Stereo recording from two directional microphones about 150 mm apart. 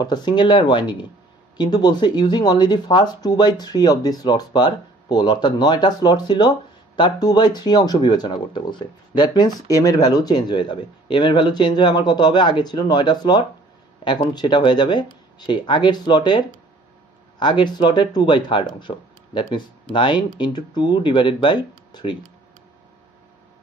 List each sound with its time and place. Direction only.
0.0 s speech: 30° left (ahead or behind)